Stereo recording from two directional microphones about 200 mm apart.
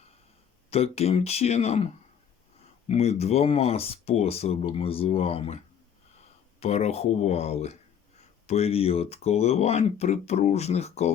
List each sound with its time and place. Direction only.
0.7 s speech: 30° left (ahead or behind)
2.9 s speech: 30° left (ahead or behind)
6.6 s speech: 30° left (ahead or behind)